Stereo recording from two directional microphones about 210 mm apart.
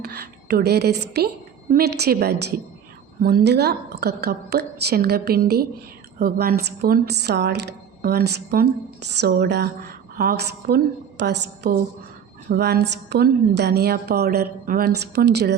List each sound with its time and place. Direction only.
0.0 s a woman's voice: 50° right (ahead or behind)